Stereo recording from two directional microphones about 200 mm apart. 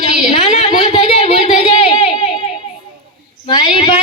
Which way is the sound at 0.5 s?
30° left (ahead or behind).